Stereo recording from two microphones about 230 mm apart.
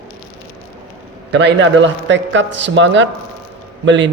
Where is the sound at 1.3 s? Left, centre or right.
Right.